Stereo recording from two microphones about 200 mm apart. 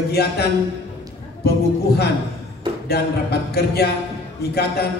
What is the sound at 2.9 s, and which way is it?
A man's voice, 55° left (ahead or behind).